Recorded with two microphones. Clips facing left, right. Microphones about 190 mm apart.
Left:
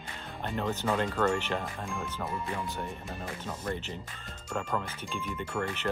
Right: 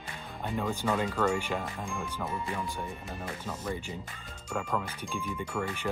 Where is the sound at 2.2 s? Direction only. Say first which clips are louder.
Right 1 dB; centre (ahead or behind).